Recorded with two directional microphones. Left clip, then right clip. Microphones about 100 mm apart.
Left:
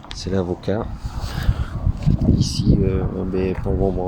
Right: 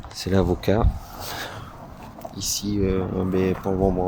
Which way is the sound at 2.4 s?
30° right (ahead or behind).